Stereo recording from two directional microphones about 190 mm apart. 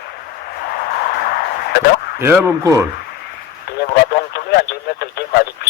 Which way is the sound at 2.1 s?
10° right (ahead or behind).